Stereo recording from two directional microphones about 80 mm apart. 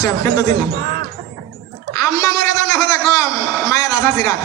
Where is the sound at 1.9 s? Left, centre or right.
Left.